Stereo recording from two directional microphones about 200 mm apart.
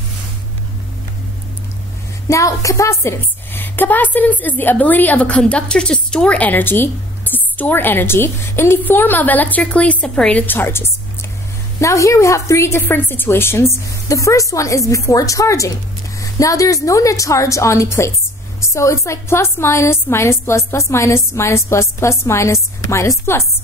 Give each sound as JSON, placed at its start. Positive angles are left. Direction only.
{"t": 2.2, "sound": "a woman's voice", "side_deg": 15}